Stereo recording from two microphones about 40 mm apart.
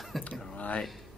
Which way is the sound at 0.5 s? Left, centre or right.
Left.